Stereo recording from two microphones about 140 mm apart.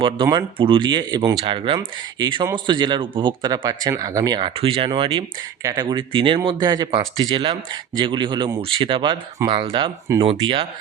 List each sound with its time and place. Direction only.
0.0 s speech: 35° right (ahead or behind)
5.6 s speech: 30° right (ahead or behind)